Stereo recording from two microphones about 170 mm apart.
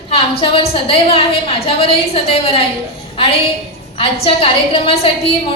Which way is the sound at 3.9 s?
30° left (ahead or behind).